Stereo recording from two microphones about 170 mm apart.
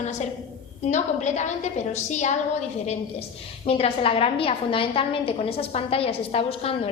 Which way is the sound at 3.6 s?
35° left (ahead or behind).